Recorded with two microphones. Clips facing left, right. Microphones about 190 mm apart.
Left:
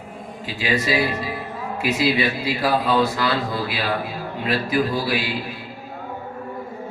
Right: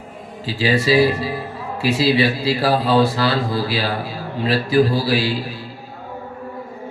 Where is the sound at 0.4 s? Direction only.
30° right (ahead or behind).